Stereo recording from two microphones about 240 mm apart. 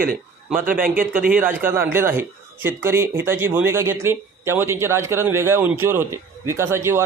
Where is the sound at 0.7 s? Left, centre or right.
Right.